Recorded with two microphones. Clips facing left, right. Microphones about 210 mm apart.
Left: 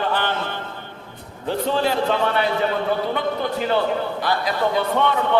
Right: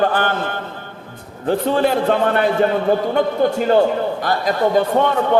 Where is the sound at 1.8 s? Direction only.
55° right (ahead or behind).